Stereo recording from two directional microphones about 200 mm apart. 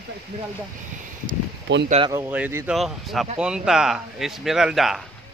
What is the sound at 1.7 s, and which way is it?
Speech, 65° right (ahead or behind).